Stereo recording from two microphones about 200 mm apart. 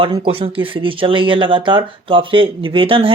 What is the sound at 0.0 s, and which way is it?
Speech, 25° right (ahead or behind).